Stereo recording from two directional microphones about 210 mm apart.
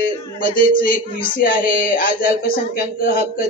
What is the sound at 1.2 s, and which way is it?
Speech, 40° left (ahead or behind).